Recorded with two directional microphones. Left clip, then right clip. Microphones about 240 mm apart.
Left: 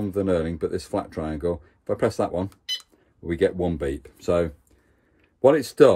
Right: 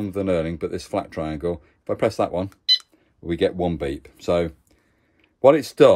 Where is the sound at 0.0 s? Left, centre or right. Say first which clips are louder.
Even; right.